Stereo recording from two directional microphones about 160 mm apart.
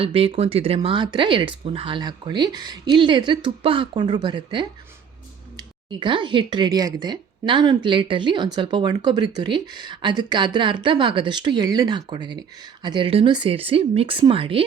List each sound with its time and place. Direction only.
0.0 s speech: 35° right (ahead or behind)